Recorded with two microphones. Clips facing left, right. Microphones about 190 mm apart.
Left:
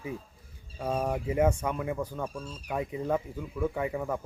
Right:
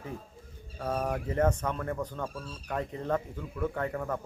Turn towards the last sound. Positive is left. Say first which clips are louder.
# left 1 dB
turn(degrees=10)  # may be behind; listen again after turning